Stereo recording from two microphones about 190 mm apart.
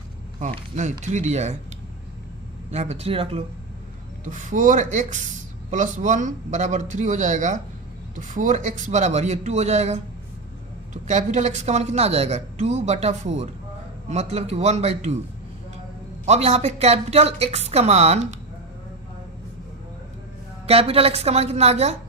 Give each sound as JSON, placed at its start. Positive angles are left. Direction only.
{"t": 0.3, "sound": "a woman's voice", "side_deg": -40}
{"t": 2.6, "sound": "a woman's voice", "side_deg": -35}
{"t": 4.3, "sound": "a woman's voice", "side_deg": -40}
{"t": 16.2, "sound": "a woman's voice", "side_deg": -35}
{"t": 20.7, "sound": "a woman's voice", "side_deg": -30}